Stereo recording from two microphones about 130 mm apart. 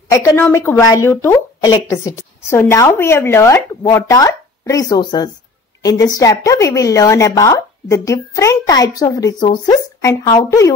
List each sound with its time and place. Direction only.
0.1 s a woman's voice: 20° left (ahead or behind)